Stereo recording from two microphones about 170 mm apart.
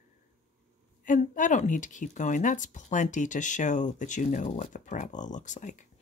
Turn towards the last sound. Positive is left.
turn(degrees=45)  # may be behind; listen again after turning